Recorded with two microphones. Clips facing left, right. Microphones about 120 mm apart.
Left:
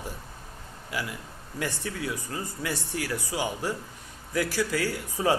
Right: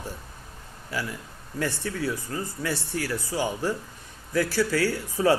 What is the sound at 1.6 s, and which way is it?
A man's voice, 15° left (ahead or behind).